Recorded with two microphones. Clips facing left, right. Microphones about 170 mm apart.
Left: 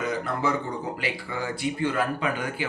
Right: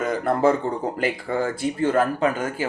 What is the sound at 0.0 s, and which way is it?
Speech, 50° right (ahead or behind).